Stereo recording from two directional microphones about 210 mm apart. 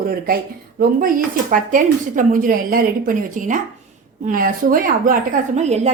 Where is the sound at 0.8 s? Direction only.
40° right (ahead or behind).